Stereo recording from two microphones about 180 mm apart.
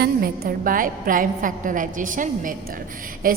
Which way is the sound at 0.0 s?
55° right (ahead or behind).